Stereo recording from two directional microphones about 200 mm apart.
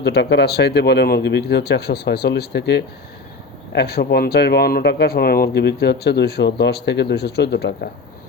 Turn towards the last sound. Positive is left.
turn(degrees=60)  # may be behind; listen again after turning